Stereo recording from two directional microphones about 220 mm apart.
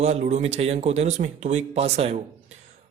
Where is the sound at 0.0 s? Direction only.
30° right (ahead or behind).